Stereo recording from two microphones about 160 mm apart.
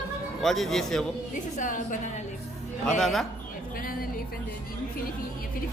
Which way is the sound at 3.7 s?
65° left (ahead or behind).